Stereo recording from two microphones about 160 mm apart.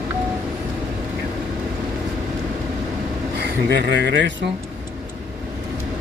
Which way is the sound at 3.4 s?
90° right.